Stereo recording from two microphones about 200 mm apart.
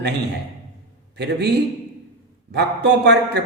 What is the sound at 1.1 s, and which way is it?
Speech, 55° right (ahead or behind).